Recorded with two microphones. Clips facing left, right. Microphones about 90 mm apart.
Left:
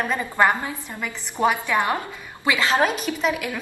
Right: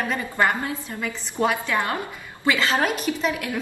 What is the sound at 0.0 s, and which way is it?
A woman's voice, 20° left (ahead or behind).